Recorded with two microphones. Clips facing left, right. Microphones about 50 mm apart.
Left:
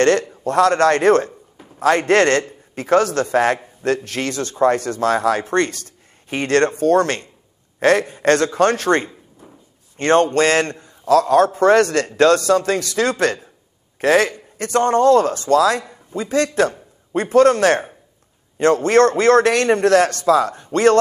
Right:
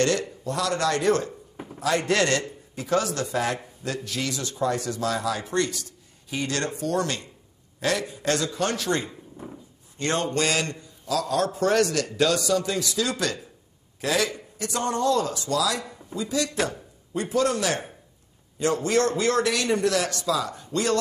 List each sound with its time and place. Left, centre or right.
0.3 s a man's voice: left
9.4 s a sound: right
9.9 s a man's voice: left